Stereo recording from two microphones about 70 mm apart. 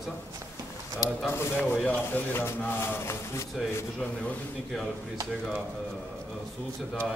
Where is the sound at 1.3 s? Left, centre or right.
Left.